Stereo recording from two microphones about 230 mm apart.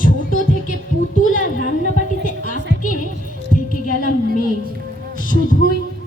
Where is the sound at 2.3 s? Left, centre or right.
Left.